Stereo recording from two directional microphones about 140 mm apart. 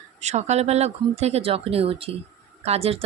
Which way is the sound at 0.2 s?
55° right (ahead or behind).